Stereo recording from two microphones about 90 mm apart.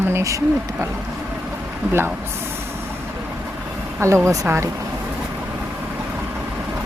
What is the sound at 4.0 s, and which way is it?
Speech, 30° right (ahead or behind).